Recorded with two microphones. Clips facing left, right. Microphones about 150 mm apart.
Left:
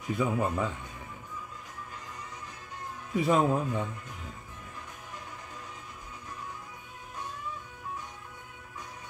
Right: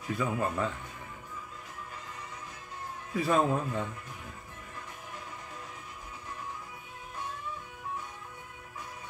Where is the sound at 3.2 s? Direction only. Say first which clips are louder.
Left 2 dB; 20° left (ahead or behind).